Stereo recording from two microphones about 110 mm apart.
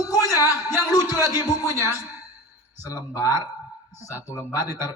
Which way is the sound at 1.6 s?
25° right (ahead or behind).